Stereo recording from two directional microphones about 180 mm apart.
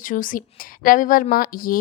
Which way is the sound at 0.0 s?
50° left (ahead or behind).